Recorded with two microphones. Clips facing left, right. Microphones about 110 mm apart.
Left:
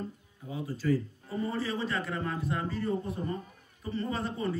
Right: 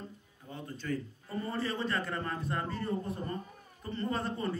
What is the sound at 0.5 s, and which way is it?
A man's voice, 5° left (ahead or behind).